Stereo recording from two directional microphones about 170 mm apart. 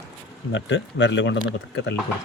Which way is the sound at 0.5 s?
90° left.